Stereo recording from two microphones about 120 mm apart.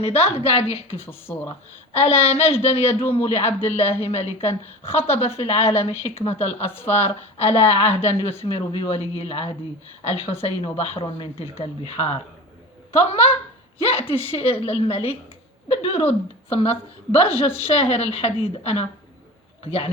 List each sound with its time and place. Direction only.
0.0 s speech: 55° left (ahead or behind)
1.0 s speech: 20° left (ahead or behind)
1.9 s speech: 60° left (ahead or behind)
6.7 s speech: 20° left (ahead or behind)
7.0 s speech: 60° left (ahead or behind)